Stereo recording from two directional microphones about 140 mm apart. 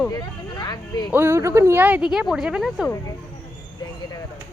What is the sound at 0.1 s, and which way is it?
Speech, 30° left (ahead or behind).